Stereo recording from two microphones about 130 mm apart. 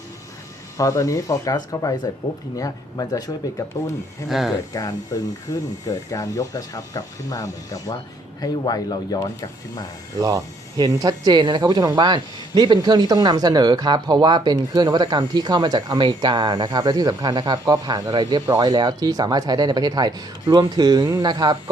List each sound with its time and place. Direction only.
0.8 s speech: 25° left (ahead or behind)
4.3 s speech: centre (ahead or behind)
4.7 s speech: 30° left (ahead or behind)
10.2 s speech: 25° right (ahead or behind)